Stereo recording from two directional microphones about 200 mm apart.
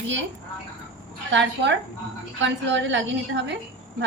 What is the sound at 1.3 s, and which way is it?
Child singing, 65° right (ahead or behind).